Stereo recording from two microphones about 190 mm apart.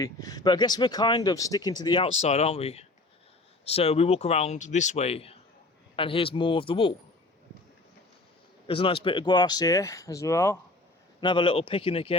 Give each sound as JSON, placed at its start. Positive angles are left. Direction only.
{"t": 0.0, "sound": "speech", "side_deg": 20}
{"t": 8.6, "sound": "speech", "side_deg": 30}
{"t": 11.2, "sound": "speech", "side_deg": 25}